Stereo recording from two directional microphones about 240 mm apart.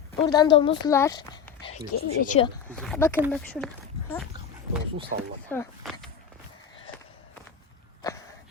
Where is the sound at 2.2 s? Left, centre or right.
Left.